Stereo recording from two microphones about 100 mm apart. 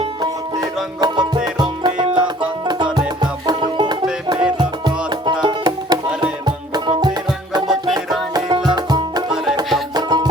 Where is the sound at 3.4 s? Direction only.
50° right (ahead or behind).